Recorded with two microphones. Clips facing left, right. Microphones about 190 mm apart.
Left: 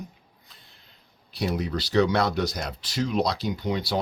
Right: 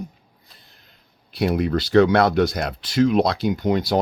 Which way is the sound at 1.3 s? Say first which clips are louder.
Right 7 dB; 60° right (ahead or behind).